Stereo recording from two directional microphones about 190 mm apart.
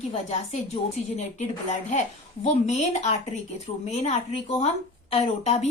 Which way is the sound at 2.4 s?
35° left (ahead or behind).